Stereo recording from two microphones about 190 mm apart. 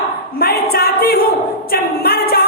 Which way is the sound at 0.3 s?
50° left (ahead or behind).